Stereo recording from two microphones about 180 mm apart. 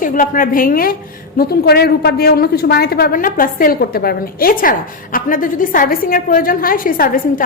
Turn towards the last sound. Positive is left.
turn(degrees=50)  # may be behind; listen again after turning